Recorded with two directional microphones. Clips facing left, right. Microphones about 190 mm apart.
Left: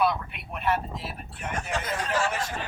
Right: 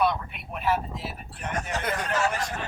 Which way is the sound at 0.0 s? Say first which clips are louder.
Even; centre (ahead or behind).